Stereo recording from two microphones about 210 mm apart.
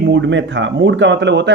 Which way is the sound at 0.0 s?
60° right (ahead or behind).